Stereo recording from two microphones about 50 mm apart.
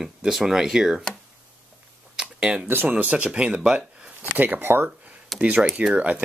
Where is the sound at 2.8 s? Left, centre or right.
Right.